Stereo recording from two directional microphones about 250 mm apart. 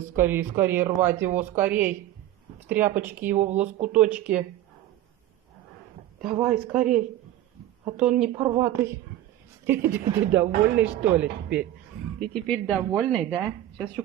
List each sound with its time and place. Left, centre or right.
0.1 s speech: centre
3.6 s speech: right
3.9 s a woman's voice: centre
6.4 s a woman's voice: centre
8.0 s a woman's voice: centre